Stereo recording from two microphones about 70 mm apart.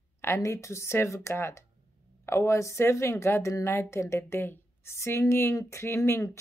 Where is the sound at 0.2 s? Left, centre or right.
Left.